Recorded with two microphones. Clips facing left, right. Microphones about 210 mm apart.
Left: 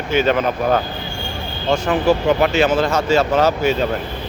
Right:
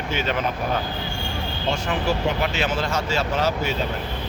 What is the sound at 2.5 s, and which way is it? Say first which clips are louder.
Speech: left 8 dB; 45° left (ahead or behind).